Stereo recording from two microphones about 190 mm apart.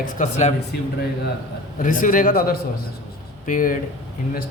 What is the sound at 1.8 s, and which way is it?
Speech, 45° left (ahead or behind).